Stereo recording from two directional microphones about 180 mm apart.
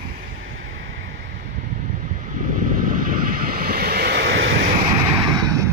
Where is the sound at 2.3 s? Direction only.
45° right (ahead or behind); by 4.6 s 75° right (ahead or behind).